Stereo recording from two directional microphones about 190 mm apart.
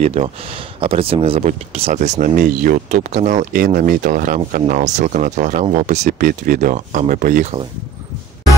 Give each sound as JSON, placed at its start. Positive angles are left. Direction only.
{"t": 0.0, "sound": "speech", "side_deg": -30}